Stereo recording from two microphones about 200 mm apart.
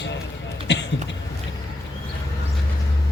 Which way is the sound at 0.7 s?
60° left (ahead or behind).